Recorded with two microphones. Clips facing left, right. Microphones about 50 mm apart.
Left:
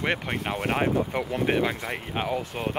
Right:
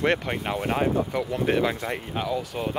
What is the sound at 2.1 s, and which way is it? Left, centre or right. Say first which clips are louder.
Speech: left 1 dB; left.